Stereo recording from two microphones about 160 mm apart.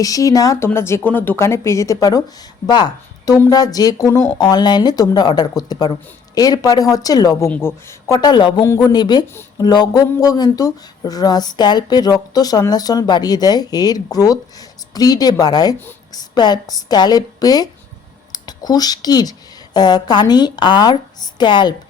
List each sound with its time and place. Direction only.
0.0 s speech: 20° left (ahead or behind)